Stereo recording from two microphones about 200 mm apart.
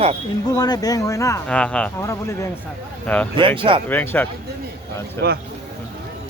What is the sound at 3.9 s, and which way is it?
Speech, 10° left (ahead or behind).